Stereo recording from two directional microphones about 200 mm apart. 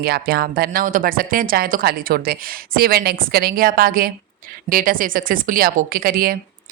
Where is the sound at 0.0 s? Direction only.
50° right (ahead or behind).